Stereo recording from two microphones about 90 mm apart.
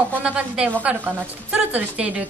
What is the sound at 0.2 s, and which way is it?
A woman's voice, 15° right (ahead or behind).